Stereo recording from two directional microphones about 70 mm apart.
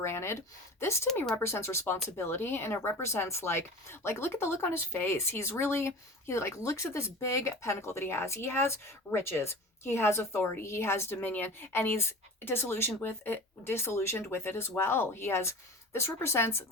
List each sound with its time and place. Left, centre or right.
0.0 s speech: left